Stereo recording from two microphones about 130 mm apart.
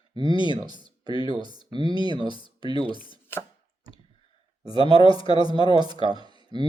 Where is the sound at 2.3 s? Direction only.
40° left (ahead or behind).